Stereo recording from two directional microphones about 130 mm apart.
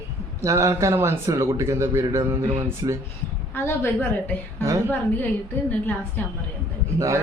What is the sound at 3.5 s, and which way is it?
Speech, 20° left (ahead or behind).